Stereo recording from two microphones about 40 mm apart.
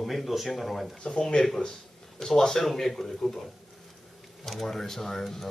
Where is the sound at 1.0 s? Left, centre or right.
Centre.